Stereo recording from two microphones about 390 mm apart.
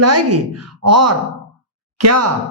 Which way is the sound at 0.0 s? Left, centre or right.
Right.